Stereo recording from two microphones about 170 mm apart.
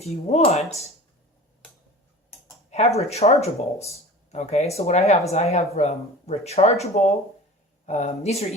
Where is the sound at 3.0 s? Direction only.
40° left (ahead or behind).